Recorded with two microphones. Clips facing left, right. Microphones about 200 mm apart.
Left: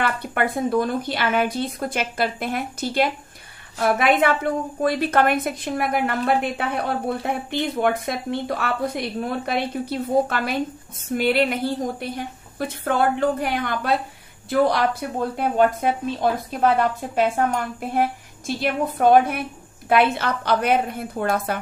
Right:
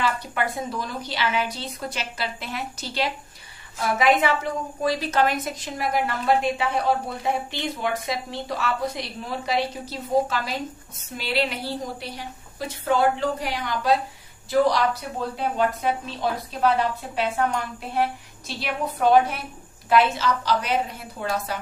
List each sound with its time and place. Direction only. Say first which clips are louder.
0.0 s a woman's voice: left 3 dB; 55° left (ahead or behind)